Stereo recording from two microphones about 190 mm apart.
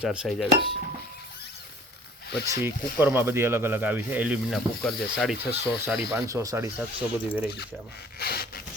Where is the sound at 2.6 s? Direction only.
10° right (ahead or behind).